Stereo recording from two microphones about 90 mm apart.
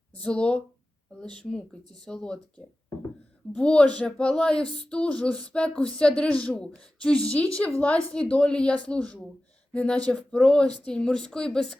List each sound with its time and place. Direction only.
0.1 s speech: 15° left (ahead or behind)
1.8 s speech: 50° right (ahead or behind)
2.0 s speech: 10° left (ahead or behind)